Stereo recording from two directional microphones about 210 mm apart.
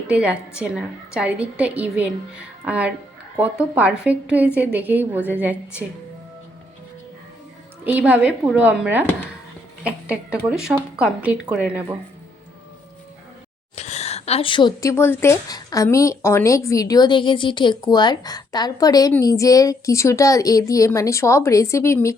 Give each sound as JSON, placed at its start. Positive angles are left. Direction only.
{"t": 0.1, "sound": "a woman's voice", "side_deg": -5}
{"t": 7.9, "sound": "a woman's voice", "side_deg": -5}
{"t": 13.7, "sound": "speech", "side_deg": 30}